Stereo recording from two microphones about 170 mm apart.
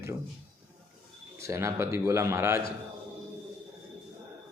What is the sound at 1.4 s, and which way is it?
A man's voice, 15° right (ahead or behind).